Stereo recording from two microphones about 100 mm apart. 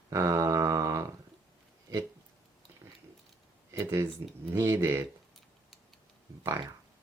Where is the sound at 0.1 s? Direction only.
35° right (ahead or behind).